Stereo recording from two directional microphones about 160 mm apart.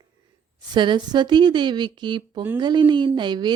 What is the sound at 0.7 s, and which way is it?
A woman's voice, 30° right (ahead or behind).